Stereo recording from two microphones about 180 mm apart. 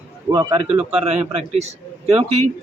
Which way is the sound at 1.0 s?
35° right (ahead or behind).